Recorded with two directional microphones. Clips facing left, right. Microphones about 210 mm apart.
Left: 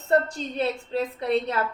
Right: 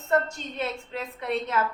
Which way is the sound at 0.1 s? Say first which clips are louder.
Left 3 dB; 35° left (ahead or behind).